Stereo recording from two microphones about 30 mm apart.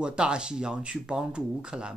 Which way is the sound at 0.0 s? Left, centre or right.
Right.